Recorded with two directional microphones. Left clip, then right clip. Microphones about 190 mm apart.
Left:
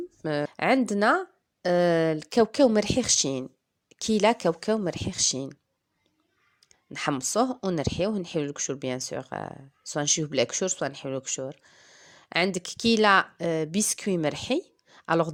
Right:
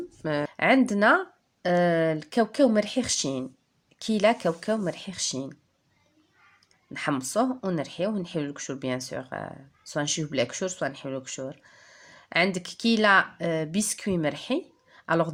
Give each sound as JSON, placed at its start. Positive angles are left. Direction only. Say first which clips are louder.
{"t": 0.2, "sound": "speech", "louder": "right 1 dB", "side_deg": 40}
{"t": 6.9, "sound": "speech", "louder": "even", "side_deg": 45}